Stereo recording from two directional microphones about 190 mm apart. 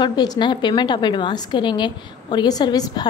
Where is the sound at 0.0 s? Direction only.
20° left (ahead or behind).